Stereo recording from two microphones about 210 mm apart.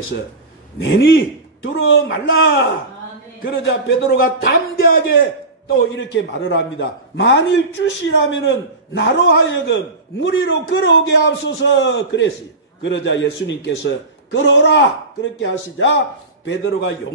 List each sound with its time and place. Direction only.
0.8 s a man's voice: 60° left (ahead or behind)
6.1 s a man's voice: 60° left (ahead or behind)